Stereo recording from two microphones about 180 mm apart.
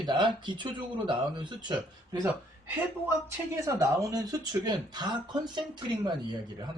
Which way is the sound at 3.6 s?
20° right (ahead or behind).